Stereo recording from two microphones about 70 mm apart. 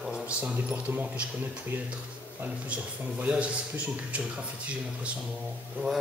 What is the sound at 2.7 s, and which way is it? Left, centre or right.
A man's voice, centre.